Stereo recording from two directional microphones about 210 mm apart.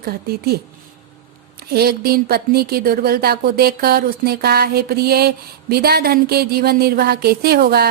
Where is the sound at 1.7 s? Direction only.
45° right (ahead or behind).